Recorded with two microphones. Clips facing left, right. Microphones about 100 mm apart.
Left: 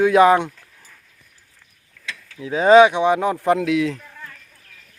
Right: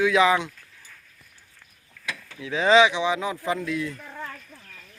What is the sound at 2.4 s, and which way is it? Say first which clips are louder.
Speech: left 7 dB; 35° left (ahead or behind).